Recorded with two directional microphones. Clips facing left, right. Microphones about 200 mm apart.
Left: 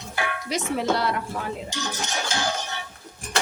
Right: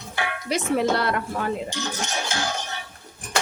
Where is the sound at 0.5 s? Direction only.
60° right (ahead or behind).